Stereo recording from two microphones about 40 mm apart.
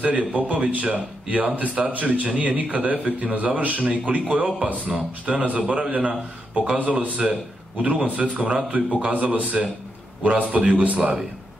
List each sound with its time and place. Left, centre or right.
0.0 s a man's voice: right
6.8 s a man's voice: right